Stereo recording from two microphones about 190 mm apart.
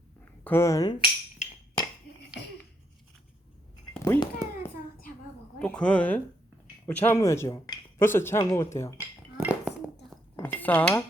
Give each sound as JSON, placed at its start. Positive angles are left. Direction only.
{"t": 0.4, "sound": "dishes", "side_deg": 15}
{"t": 4.0, "sound": "a sound", "side_deg": 15}
{"t": 5.5, "sound": "speech", "side_deg": 5}
{"t": 9.4, "sound": "dishes", "side_deg": -5}
{"t": 10.3, "sound": "cutlery", "side_deg": 10}